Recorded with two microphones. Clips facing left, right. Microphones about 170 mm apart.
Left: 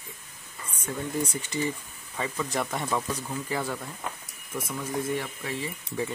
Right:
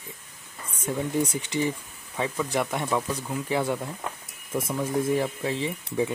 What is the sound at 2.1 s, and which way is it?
Speech, 5° right (ahead or behind).